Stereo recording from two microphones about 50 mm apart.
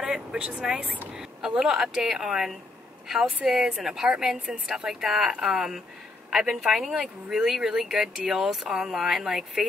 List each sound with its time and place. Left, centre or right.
0.0 s vehicle: centre
0.5 s speech: centre